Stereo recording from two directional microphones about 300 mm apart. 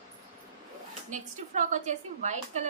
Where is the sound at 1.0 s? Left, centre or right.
Right.